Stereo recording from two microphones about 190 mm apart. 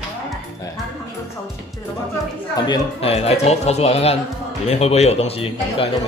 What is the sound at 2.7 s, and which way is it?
Speech, 30° left (ahead or behind).